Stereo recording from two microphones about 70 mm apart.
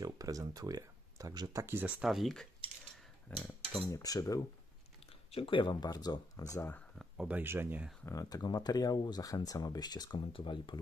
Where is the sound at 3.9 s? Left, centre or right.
Left.